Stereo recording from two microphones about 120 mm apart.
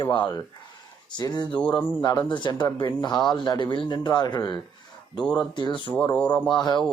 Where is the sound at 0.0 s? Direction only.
40° left (ahead or behind).